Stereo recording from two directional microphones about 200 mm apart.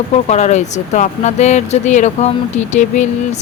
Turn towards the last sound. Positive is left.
turn(degrees=35)  # may be behind; listen again after turning